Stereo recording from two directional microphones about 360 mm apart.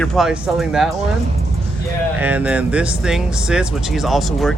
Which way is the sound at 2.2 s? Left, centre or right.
Centre.